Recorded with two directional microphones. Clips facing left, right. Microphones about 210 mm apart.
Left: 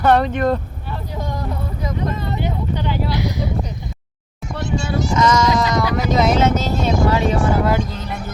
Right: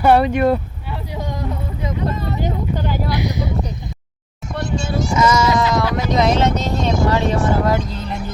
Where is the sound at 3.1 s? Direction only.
15° right (ahead or behind).